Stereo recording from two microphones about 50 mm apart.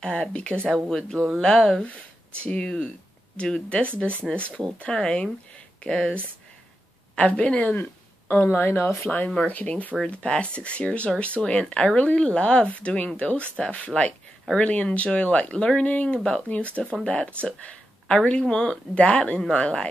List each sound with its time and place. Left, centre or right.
0.0 s speech: centre
0.8 s speech: centre
2.4 s speech: left
4.3 s speech: centre
4.7 s speech: left
7.2 s speech: left
7.6 s speech: left